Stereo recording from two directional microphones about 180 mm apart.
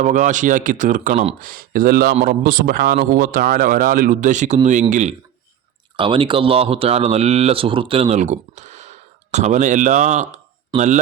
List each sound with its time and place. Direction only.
0.0 s a man's voice: 45° right (ahead or behind)
1.4 s a man's voice: 50° right (ahead or behind)
6.0 s a man's voice: 30° right (ahead or behind)
10.7 s speech: 25° right (ahead or behind)